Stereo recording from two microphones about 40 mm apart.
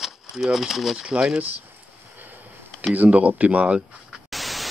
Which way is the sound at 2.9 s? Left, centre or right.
Right.